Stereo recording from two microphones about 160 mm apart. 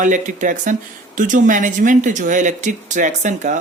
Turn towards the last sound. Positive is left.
turn(degrees=-50)  # may be behind; listen again after turning